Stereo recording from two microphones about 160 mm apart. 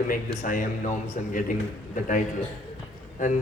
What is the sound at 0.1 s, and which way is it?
A man's voice, 55° left (ahead or behind).